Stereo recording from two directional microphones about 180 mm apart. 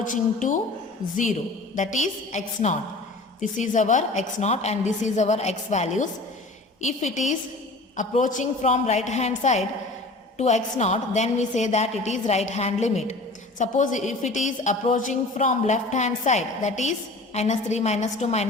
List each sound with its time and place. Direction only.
0.0 s a woman's voice: 45° left (ahead or behind)